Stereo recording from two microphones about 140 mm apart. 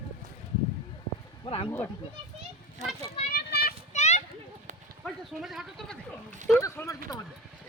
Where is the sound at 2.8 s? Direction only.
55° right (ahead or behind).